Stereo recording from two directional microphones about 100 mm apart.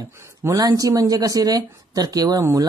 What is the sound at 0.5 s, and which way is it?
Speech, 35° right (ahead or behind).